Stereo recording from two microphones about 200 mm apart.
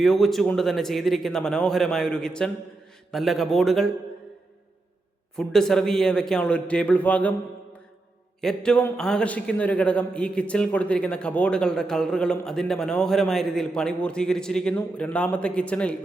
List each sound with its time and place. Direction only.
0.0 s a man's voice: centre (ahead or behind)
5.4 s a man's voice: 5° left (ahead or behind)
8.4 s a man's voice: 5° left (ahead or behind)